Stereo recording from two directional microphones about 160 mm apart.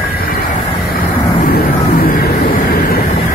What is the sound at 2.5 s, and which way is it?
Vehicle, 65° left (ahead or behind).